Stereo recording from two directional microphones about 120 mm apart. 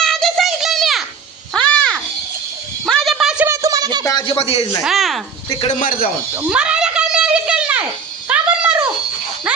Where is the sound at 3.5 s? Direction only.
30° right (ahead or behind).